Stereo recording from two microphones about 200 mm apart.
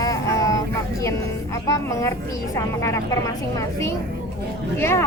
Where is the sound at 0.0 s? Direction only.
15° left (ahead or behind).